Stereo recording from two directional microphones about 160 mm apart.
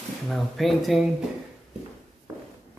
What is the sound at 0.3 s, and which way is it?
Speech, centre (ahead or behind).